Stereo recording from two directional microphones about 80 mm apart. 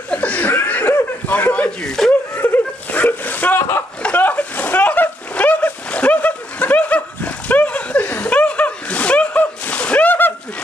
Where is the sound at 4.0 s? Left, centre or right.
Centre.